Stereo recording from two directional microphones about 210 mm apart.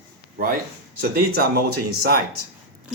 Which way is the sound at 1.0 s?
45° right (ahead or behind).